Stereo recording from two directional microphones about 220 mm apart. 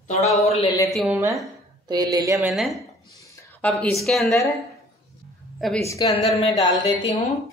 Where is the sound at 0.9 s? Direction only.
Centre (ahead or behind).